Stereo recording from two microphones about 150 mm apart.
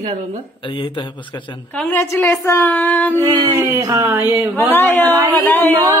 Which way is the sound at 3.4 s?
15° right (ahead or behind).